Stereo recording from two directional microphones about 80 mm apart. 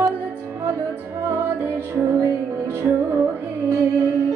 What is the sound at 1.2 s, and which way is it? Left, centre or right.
Music, right.